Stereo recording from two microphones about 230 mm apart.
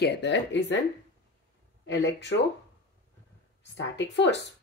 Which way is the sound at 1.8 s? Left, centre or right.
Left.